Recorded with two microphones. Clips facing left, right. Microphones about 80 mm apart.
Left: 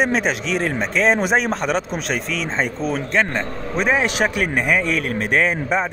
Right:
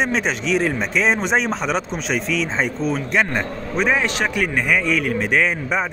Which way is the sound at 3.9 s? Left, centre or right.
Centre.